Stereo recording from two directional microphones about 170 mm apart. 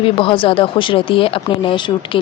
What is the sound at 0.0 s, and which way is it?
Speech, 30° left (ahead or behind).